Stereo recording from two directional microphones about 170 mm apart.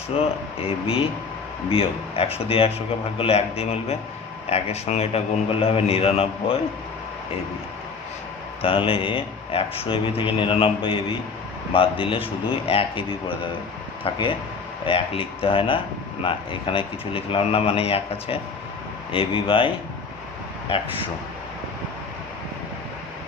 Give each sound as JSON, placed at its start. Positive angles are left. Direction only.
{"t": 0.2, "sound": "speech", "side_deg": 35}
{"t": 8.6, "sound": "speech", "side_deg": 30}